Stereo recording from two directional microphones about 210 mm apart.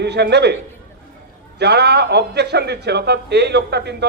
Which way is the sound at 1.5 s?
50° right (ahead or behind).